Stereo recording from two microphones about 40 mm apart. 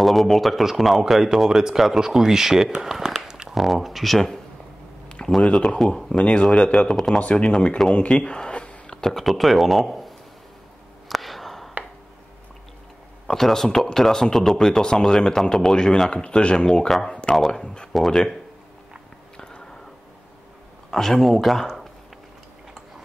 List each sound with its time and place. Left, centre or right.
0.0 s speech: centre
5.4 s speech: centre
7.9 s a sound: left
9.2 s speech: centre
11.1 s sniff: centre
13.3 s speech: centre
17.9 s speech: centre
19.3 s a sound: left
20.9 s speech: centre